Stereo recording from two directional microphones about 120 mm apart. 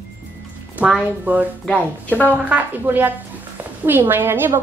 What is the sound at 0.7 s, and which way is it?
Speech, 10° right (ahead or behind).